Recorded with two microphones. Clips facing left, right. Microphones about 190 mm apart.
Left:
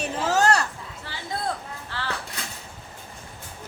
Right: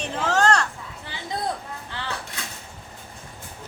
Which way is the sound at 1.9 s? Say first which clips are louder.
Left 2 dB; 20° right (ahead or behind).